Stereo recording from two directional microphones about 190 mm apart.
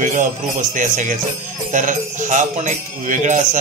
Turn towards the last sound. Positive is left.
turn(degrees=-40)  # may be behind; listen again after turning